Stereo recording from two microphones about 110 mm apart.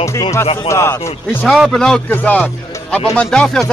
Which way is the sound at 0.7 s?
25° left (ahead or behind).